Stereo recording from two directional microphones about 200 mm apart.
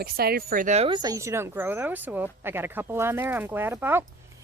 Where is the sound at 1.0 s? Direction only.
15° right (ahead or behind).